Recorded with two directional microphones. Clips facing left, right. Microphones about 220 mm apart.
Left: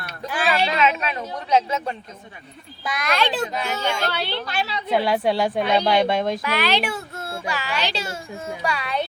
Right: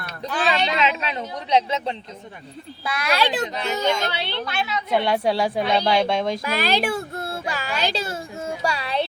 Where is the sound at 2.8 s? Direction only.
5° right (ahead or behind).